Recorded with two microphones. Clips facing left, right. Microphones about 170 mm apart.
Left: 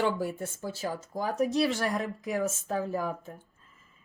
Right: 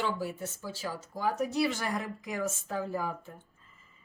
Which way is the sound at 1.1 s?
40° left (ahead or behind).